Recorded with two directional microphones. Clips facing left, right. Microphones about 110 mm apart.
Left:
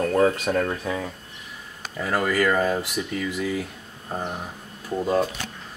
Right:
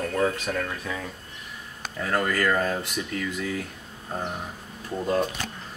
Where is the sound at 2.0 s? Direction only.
5° left (ahead or behind).